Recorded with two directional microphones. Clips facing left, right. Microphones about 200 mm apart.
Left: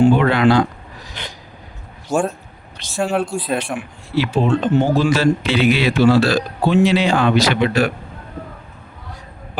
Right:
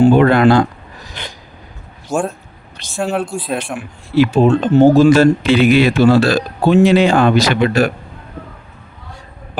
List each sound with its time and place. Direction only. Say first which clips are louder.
0.0 s speech: right 4 dB; 45° right (ahead or behind)
2.0 s speech: even; centre (ahead or behind)
4.1 s speech: right 6 dB; 50° right (ahead or behind)